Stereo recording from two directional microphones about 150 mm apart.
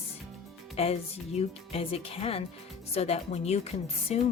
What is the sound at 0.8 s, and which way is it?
Speech, 40° left (ahead or behind).